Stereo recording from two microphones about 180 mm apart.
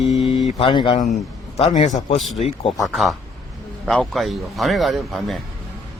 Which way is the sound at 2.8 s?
Centre (ahead or behind).